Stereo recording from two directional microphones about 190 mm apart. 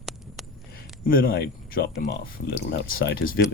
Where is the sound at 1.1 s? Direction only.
50° left (ahead or behind).